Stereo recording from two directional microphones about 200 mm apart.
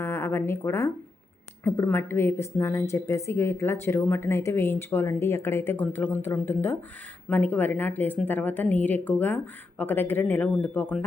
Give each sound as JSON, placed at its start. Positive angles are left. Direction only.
{"t": 0.0, "sound": "a woman's voice", "side_deg": 15}